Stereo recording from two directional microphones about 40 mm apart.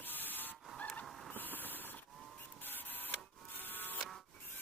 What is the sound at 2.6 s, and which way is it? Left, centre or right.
Printer, left.